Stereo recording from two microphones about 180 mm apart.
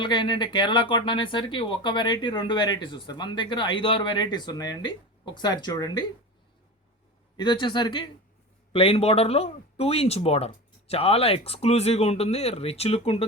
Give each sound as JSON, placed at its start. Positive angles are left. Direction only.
{"t": 0.0, "sound": "speech", "side_deg": 25}
{"t": 7.3, "sound": "speech", "side_deg": 25}